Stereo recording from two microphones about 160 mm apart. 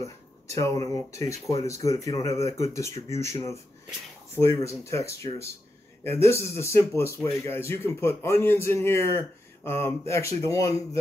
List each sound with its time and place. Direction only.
0.0 s a man's voice: 20° left (ahead or behind)